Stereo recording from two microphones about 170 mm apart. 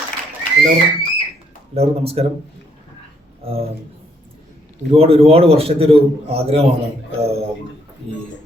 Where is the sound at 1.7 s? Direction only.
35° right (ahead or behind).